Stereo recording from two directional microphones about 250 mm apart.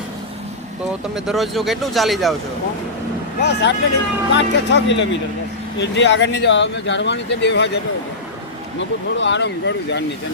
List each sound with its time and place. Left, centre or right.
1.1 s speech: centre
3.4 s speech: left
8.8 s speech: left